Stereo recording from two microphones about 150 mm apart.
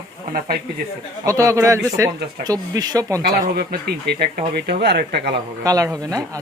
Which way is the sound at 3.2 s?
90° right.